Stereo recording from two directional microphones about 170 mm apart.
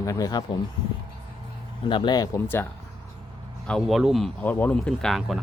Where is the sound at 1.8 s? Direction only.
30° left (ahead or behind); by 2.7 s 10° left (ahead or behind).